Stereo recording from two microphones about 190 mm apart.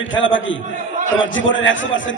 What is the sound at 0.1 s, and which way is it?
A man's voice, 80° left.